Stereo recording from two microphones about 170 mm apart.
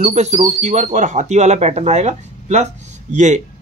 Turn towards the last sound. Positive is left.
turn(degrees=-45)  # may be behind; listen again after turning